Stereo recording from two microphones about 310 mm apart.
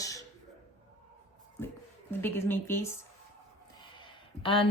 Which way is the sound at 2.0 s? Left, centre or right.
Centre.